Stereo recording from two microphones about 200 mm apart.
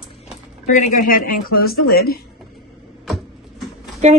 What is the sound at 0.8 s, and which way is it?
A woman's voice, 45° left (ahead or behind).